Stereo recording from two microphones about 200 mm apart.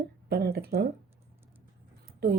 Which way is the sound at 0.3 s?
50° right (ahead or behind).